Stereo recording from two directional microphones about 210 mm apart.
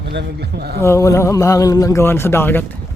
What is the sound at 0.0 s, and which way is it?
Speech, 55° right (ahead or behind).